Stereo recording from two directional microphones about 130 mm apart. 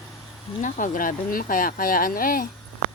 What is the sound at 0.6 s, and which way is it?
Speech, 85° left.